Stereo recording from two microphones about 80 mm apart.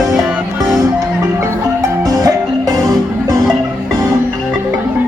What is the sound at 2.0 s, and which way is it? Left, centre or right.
Music, right.